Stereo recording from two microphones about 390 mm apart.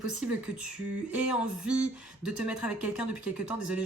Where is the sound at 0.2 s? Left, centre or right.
Centre.